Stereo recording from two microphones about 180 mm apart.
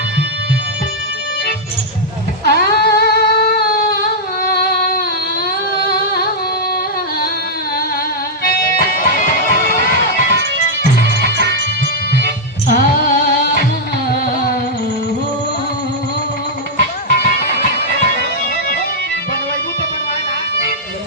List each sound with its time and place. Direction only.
2.4 s a sound: 60° left (ahead or behind)
8.4 s music: 55° left (ahead or behind)
12.2 s music: 55° left (ahead or behind)
16.8 s music: 60° left (ahead or behind)